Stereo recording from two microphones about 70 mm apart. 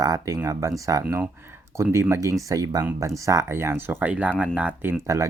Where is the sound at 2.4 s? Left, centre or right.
Right.